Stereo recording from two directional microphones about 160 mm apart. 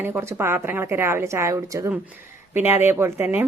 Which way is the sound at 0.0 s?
15° right (ahead or behind).